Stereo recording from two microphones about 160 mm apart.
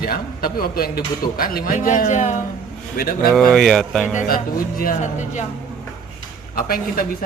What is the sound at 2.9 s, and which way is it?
Speech, 65° left (ahead or behind).